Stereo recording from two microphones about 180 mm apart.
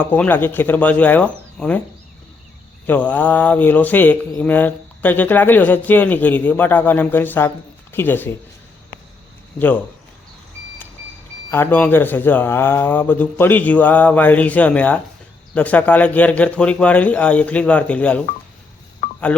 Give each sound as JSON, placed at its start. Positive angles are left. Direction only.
{"t": 0.0, "sound": "a man's voice", "side_deg": 10}
{"t": 2.8, "sound": "a man's voice", "side_deg": 10}
{"t": 9.6, "sound": "a man's voice", "side_deg": 10}
{"t": 11.5, "sound": "a man's voice", "side_deg": 10}
{"t": 19.0, "sound": "telephone dialing", "side_deg": 50}